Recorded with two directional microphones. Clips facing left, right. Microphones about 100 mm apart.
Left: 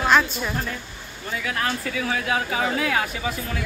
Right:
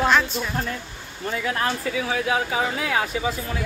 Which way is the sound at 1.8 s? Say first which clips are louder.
Right 2 dB; 15° right (ahead or behind).